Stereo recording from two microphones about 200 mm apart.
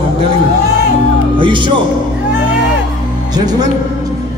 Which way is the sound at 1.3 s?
25° right (ahead or behind).